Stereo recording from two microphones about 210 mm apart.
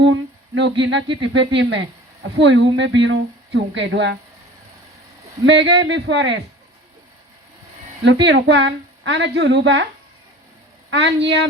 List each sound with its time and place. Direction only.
0.0 s a sound: 60° right (ahead or behind)
0.8 s a woman's voice: 60° right (ahead or behind)
5.5 s a woman's voice: 60° right (ahead or behind)
8.0 s a woman's voice: 55° right (ahead or behind)
10.9 s a woman's voice: 60° right (ahead or behind)